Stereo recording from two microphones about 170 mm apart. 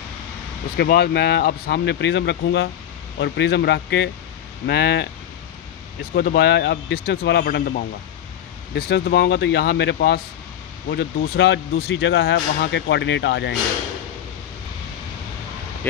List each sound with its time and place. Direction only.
0.7 s speech: 70° left (ahead or behind)
6.1 s speech: 70° left (ahead or behind)